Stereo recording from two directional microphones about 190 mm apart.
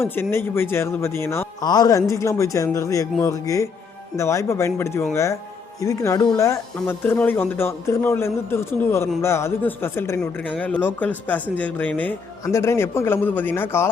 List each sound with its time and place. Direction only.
0.0 s a man's voice: 10° left (ahead or behind)